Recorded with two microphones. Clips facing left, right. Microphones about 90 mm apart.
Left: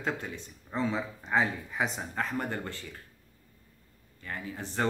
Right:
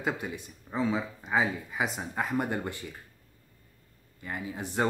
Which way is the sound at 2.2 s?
15° right (ahead or behind).